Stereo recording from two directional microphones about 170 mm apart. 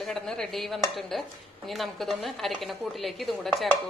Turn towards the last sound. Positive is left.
turn(degrees=0)  # may be behind; listen again after turning